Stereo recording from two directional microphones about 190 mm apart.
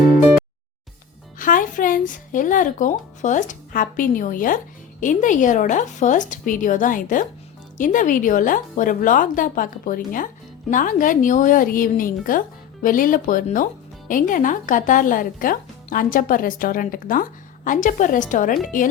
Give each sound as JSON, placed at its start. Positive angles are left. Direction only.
{"t": 1.4, "sound": "speech", "side_deg": 45}